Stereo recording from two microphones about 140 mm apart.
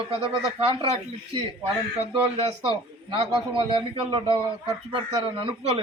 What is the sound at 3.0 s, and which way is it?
Speech, 40° right (ahead or behind).